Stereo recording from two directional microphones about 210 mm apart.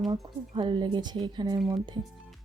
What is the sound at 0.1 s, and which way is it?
Speech, 20° right (ahead or behind).